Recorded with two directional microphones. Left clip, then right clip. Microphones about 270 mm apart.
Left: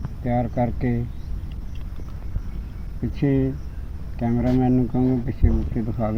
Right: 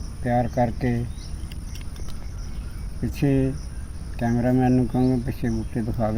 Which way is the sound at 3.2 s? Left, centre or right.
Centre.